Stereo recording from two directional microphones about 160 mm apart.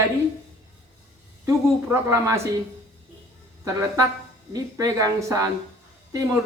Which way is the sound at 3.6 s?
20° right (ahead or behind).